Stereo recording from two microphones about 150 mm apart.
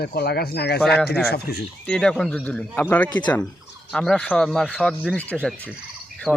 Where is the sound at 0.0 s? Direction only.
90° left.